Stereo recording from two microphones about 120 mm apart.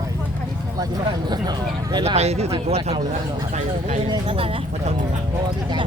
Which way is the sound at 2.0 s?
60° right (ahead or behind).